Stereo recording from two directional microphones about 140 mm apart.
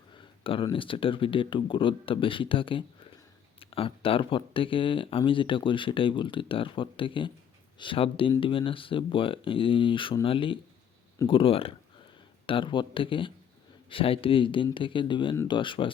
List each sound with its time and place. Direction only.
0.1 s speech: 35° left (ahead or behind)